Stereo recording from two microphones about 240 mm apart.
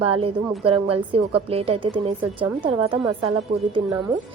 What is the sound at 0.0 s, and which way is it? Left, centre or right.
A woman's voice, right.